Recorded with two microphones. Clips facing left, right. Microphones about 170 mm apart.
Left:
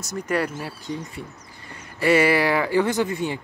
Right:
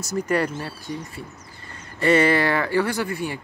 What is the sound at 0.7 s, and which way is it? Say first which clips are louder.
Speech: left 1 dB; 20° left (ahead or behind).